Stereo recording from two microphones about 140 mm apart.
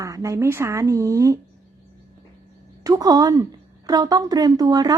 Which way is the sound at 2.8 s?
25° right (ahead or behind).